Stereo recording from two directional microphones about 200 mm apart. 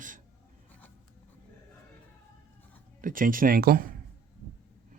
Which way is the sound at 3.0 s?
45° right (ahead or behind).